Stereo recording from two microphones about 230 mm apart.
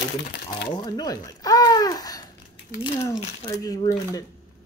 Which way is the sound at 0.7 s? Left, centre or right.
Centre.